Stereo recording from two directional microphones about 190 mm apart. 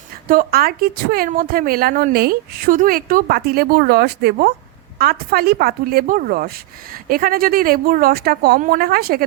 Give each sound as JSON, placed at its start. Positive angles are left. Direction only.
{"t": 0.3, "sound": "a woman's voice", "side_deg": -50}